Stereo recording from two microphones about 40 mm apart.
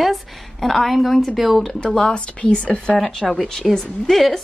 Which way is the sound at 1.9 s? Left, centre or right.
Centre.